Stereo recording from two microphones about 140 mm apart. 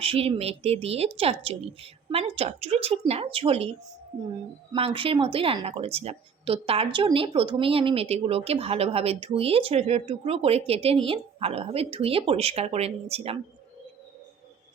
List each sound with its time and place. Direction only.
0.0 s speech: 45° right (ahead or behind)